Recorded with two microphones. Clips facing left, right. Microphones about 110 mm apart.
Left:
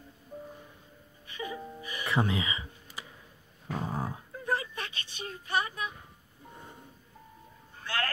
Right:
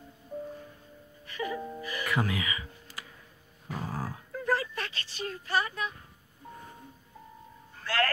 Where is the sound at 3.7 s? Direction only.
20° left (ahead or behind).